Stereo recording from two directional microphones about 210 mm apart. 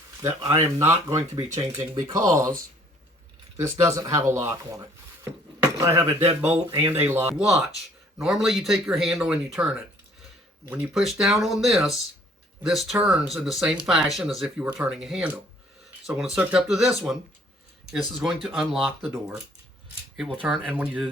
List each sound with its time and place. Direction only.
0.2 s speech: 15° right (ahead or behind)
3.6 s speech: 15° right (ahead or behind); by 20.4 s 5° left (ahead or behind)
20.4 s speech: 5° right (ahead or behind)